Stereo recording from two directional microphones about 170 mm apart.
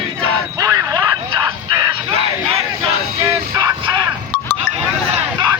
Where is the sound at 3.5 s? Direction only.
20° right (ahead or behind).